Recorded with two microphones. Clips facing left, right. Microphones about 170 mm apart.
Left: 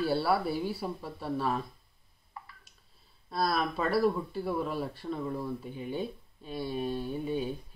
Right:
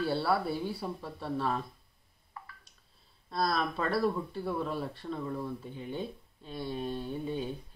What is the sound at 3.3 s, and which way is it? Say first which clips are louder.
Speech: left 1 dB; 5° left (ahead or behind).